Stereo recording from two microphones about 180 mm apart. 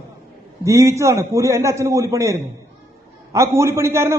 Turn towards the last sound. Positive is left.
turn(degrees=-15)  # may be behind; listen again after turning